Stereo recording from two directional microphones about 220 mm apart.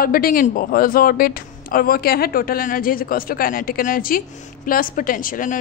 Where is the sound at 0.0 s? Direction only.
40° left (ahead or behind).